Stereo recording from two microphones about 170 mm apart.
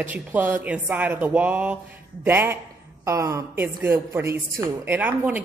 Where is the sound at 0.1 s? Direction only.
10° right (ahead or behind).